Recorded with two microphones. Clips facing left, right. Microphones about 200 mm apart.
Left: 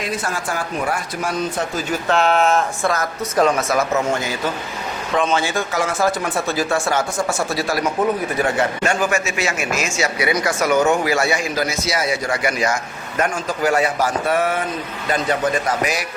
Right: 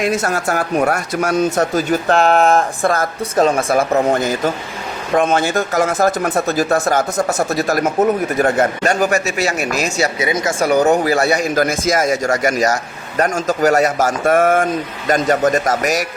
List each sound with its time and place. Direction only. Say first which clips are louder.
0.3 s speech: right 7 dB; 70° right (ahead or behind)
1.3 s speech: right 7 dB; 45° right (ahead or behind)
2.8 s speech: right 4 dB; 50° right (ahead or behind)
3.3 s speech: right 3 dB; 30° right (ahead or behind)
4.2 s speech: right 5 dB; 45° right (ahead or behind)
10.2 s speech: right 2 dB; 25° right (ahead or behind); by 16.0 s 45° right (ahead or behind)